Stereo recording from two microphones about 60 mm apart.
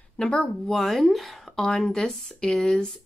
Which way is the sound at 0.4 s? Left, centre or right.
Centre.